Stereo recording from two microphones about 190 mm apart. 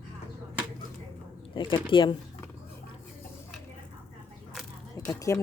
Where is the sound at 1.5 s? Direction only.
25° left (ahead or behind).